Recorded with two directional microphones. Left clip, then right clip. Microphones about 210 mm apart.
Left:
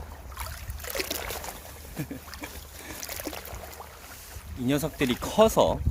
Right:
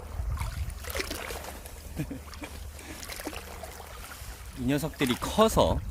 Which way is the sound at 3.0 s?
15° left (ahead or behind).